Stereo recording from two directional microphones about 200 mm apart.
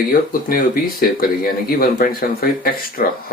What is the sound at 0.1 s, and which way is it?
Speech, 45° left (ahead or behind).